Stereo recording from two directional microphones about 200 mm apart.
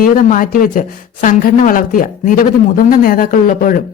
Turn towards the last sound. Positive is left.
turn(degrees=40)  # may be behind; listen again after turning